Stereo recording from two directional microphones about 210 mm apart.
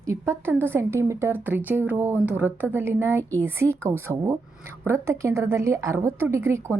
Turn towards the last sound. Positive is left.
turn(degrees=-10)  # may be behind; listen again after turning